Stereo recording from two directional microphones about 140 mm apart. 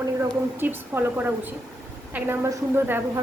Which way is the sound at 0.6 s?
15° right (ahead or behind).